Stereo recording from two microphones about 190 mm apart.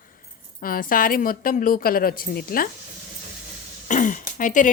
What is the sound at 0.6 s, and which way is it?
Speech, 50° left (ahead or behind).